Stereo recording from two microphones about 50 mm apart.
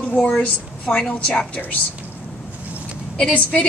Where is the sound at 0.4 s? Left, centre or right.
Left.